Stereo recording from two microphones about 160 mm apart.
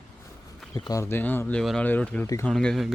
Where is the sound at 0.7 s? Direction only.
25° left (ahead or behind).